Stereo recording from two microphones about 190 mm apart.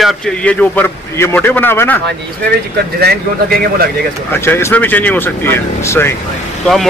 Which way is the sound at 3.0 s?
55° right (ahead or behind).